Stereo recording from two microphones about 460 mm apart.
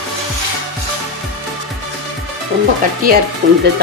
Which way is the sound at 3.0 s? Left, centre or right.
Centre.